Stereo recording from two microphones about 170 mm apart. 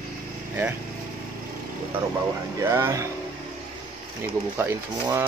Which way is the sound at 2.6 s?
15° right (ahead or behind).